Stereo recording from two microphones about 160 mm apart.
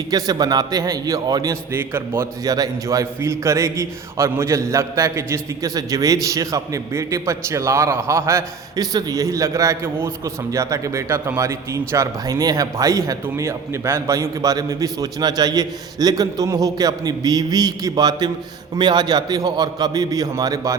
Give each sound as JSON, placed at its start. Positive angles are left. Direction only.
{"t": 0.1, "sound": "a man's voice", "side_deg": -25}